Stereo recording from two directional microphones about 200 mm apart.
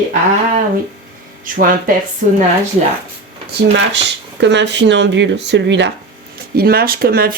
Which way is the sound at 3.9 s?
65° right (ahead or behind).